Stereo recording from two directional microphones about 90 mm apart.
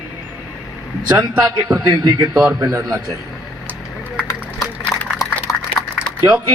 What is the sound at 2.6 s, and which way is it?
Speech, 35° right (ahead or behind).